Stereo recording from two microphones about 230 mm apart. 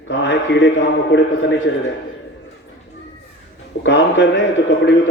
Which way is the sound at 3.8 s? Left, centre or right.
Left.